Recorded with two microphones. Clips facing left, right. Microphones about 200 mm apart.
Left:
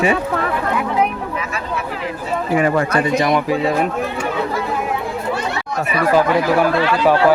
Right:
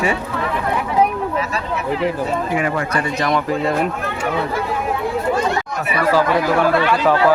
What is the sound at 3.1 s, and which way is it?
Speech, 15° left (ahead or behind).